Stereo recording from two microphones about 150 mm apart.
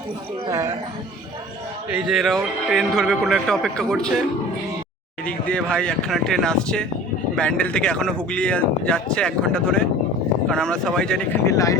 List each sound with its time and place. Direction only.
0.4 s speech: 20° right (ahead or behind)
2.0 s speech: centre (ahead or behind)
11.4 s speech: 20° left (ahead or behind)